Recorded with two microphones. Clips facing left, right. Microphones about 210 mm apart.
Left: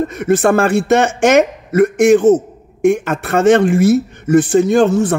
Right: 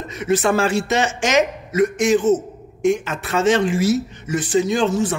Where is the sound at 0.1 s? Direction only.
55° left (ahead or behind).